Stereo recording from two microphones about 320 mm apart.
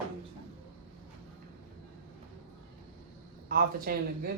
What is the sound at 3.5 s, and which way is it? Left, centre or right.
Speech, right.